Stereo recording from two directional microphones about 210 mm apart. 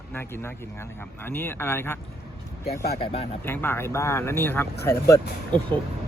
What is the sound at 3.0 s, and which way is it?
Speech, 25° left (ahead or behind).